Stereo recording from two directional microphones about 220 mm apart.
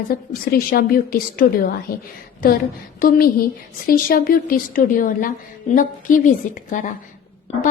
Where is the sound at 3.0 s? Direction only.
40° left (ahead or behind).